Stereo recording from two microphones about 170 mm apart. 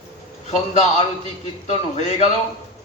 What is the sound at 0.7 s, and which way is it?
A man's voice, 40° left (ahead or behind).